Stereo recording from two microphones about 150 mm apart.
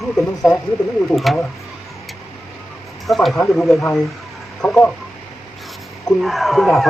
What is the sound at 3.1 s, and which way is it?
Speech, centre (ahead or behind).